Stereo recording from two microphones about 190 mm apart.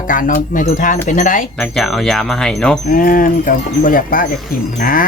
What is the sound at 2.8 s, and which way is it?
Speech, 45° left (ahead or behind).